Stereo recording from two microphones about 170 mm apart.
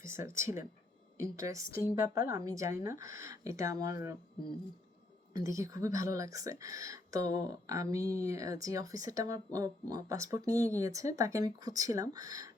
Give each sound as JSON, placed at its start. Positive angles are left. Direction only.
{"t": 0.0, "sound": "speech", "side_deg": -15}
{"t": 5.3, "sound": "speech", "side_deg": -20}